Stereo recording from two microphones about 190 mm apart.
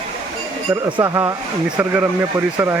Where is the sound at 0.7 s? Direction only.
20° right (ahead or behind).